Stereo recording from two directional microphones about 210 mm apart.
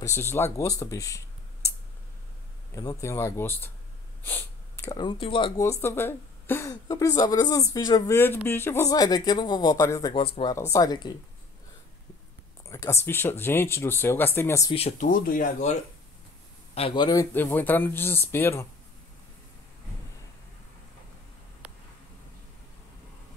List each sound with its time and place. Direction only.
0.0 s speech: 10° left (ahead or behind)
2.7 s speech: 15° left (ahead or behind)
5.6 s speech: 10° left (ahead or behind)
12.6 s speech: 15° left (ahead or behind)
14.7 s speech: 30° left (ahead or behind)
16.7 s speech: 25° left (ahead or behind)
21.6 s a sound: 5° right (ahead or behind)